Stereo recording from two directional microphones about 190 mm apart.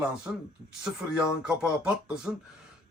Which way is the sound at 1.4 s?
5° right (ahead or behind).